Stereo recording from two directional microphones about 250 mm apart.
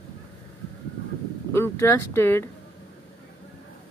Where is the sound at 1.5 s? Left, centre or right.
Centre.